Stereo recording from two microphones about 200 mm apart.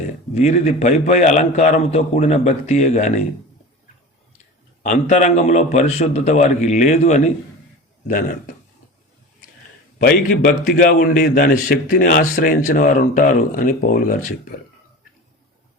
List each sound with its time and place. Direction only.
0.3 s a man's voice: 35° left (ahead or behind)
4.8 s a man's voice: 35° left (ahead or behind)
10.0 s a man's voice: 45° left (ahead or behind)